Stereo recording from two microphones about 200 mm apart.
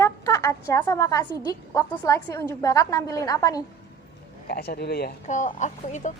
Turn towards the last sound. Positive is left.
turn(degrees=40)  # may be behind; listen again after turning